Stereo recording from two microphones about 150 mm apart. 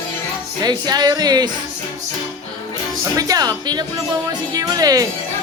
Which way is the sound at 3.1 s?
25° right (ahead or behind).